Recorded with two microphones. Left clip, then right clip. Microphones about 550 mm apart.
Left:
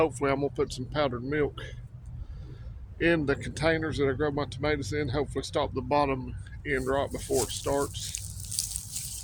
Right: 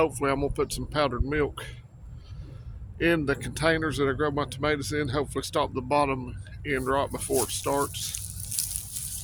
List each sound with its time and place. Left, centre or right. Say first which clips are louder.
0.0 s speech: right 1 dB; right
3.0 s speech: right 1 dB; right
8.5 s a sound: left 1 dB; right